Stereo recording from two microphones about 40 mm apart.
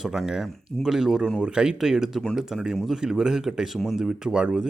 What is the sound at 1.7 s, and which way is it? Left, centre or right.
Speech, centre.